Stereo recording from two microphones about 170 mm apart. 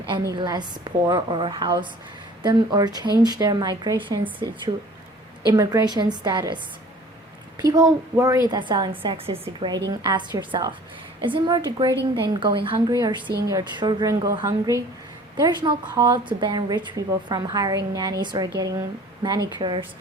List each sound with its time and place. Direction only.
0.3 s a woman's voice: 25° right (ahead or behind)
7.6 s a woman's voice: 20° right (ahead or behind)